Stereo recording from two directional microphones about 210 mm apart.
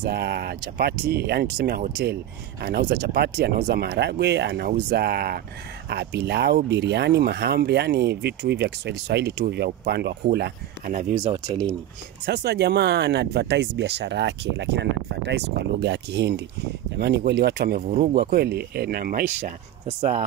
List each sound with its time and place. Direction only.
0.0 s speech: 50° right (ahead or behind)
11.0 s speech: 35° right (ahead or behind)
12.3 s speech: 50° right (ahead or behind)
17.8 s speech: 35° right (ahead or behind)